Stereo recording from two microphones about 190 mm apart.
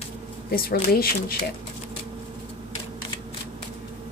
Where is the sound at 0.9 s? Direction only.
55° left (ahead or behind).